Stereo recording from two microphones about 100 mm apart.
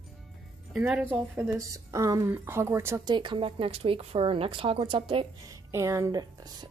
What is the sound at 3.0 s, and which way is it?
Speech, 50° right (ahead or behind).